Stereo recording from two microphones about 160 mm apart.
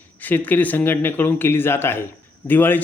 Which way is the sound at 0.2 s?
10° left (ahead or behind).